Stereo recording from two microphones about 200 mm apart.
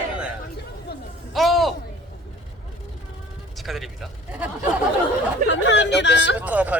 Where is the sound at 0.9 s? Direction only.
50° left (ahead or behind).